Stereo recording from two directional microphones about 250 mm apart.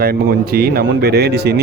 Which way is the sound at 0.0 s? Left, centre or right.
Right.